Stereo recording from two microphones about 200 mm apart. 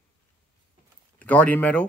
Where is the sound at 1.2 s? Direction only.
5° left (ahead or behind).